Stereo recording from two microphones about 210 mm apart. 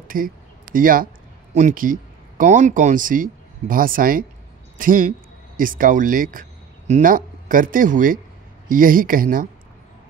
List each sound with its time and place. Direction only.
0.1 s speech: 40° right (ahead or behind)